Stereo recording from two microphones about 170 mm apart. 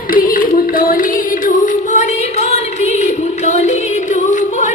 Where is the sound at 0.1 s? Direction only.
55° left (ahead or behind).